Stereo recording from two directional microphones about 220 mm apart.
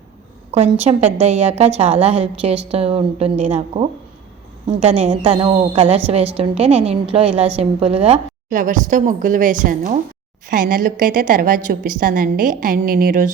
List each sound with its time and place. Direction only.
0.5 s a woman's voice: 30° right (ahead or behind)